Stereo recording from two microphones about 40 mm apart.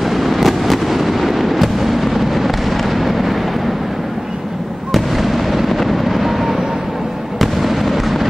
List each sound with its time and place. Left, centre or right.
0.0 s fireworks: centre
4.9 s fireworks: centre